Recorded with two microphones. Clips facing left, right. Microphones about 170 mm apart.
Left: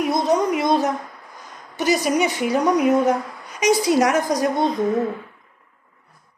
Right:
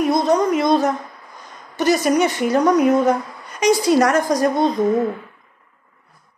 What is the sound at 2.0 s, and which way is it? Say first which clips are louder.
A woman's voice: right 3 dB; 5° left (ahead or behind).